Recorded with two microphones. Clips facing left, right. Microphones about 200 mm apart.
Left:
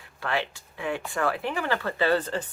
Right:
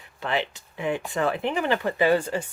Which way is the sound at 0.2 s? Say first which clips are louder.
Right 2 dB; 20° right (ahead or behind).